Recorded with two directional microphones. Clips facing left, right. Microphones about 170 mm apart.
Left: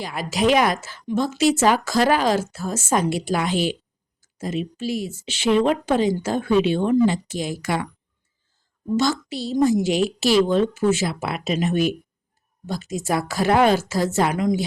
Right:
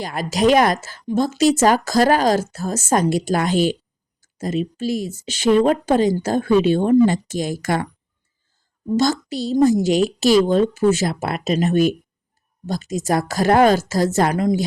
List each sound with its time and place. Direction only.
0.0 s a woman's voice: 45° right (ahead or behind)
9.0 s a woman's voice: 40° right (ahead or behind)